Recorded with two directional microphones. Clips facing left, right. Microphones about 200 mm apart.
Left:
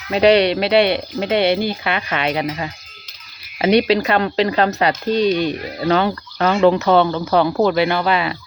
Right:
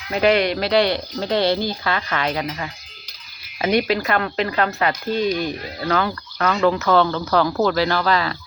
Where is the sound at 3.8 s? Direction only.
25° left (ahead or behind).